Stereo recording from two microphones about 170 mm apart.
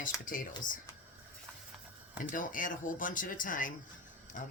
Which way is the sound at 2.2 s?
50° left (ahead or behind).